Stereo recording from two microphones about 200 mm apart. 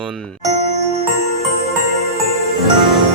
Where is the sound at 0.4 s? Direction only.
35° right (ahead or behind).